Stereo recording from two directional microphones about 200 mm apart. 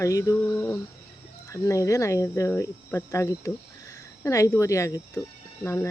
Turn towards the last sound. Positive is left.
turn(degrees=15)  # may be behind; listen again after turning